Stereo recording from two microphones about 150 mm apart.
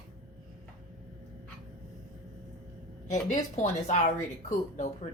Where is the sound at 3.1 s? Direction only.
55° left (ahead or behind).